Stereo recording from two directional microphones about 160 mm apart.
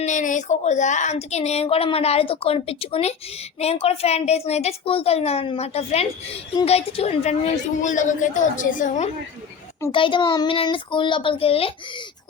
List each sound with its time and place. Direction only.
0.0 s a woman's voice: 50° left (ahead or behind)
9.9 s a woman's voice: 30° left (ahead or behind)